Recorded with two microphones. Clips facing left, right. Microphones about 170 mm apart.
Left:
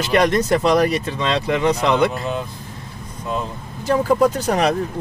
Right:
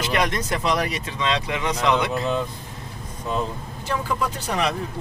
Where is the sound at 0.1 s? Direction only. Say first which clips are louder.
Left 9 dB; 35° left (ahead or behind).